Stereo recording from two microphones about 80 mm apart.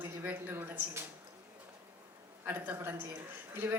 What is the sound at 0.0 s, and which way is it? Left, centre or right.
Speech, right.